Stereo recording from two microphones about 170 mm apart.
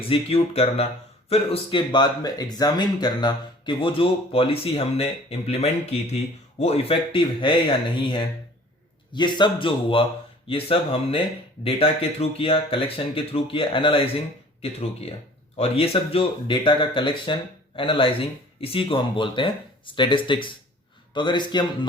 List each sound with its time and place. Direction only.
0.1 s speech: 35° left (ahead or behind)